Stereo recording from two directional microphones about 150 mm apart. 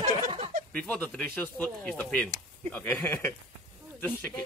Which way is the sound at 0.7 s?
10° left (ahead or behind).